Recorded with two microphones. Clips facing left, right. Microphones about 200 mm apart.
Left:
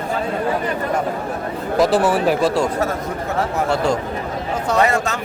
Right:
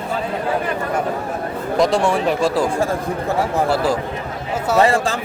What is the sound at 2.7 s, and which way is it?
Speech, 30° right (ahead or behind).